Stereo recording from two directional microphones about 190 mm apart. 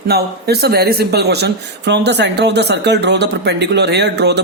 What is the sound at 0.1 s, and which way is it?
Speech, 55° right (ahead or behind).